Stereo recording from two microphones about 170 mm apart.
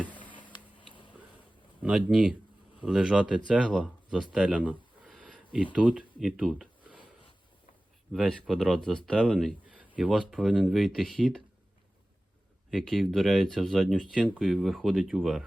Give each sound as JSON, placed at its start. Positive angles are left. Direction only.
{"t": 0.2, "sound": "a sound", "side_deg": 30}
{"t": 1.8, "sound": "speech", "side_deg": -5}
{"t": 8.1, "sound": "speech", "side_deg": 0}
{"t": 12.7, "sound": "speech", "side_deg": 0}